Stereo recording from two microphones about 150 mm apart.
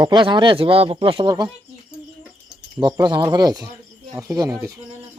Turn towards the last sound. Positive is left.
turn(degrees=-20)  # may be behind; listen again after turning